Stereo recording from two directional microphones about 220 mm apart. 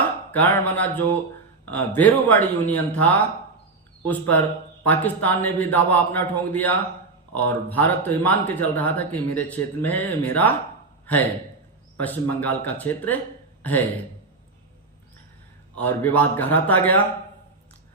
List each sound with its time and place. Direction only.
0.3 s speech: 5° left (ahead or behind)
11.9 s speech: 10° left (ahead or behind)
15.7 s speech: 10° left (ahead or behind)